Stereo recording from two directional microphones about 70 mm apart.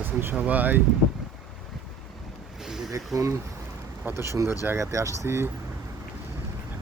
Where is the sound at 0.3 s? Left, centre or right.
Right.